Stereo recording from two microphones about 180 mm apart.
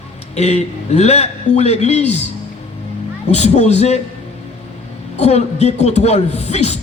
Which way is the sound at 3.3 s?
40° left (ahead or behind).